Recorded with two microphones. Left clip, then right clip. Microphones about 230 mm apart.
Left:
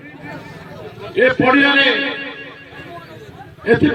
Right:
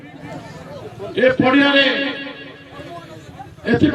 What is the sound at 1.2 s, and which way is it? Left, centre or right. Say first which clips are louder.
A man's voice: left 2 dB; right.